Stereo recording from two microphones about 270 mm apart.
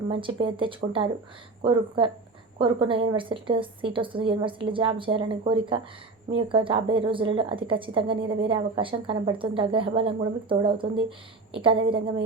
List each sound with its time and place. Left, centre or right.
0.1 s a woman's voice: centre